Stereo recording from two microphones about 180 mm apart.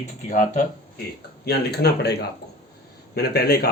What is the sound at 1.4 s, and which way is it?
Speech, 65° left (ahead or behind).